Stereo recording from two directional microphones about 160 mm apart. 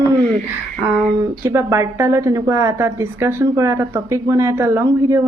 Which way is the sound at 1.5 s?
15° right (ahead or behind).